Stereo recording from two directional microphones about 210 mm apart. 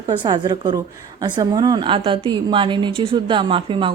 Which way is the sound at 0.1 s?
20° right (ahead or behind).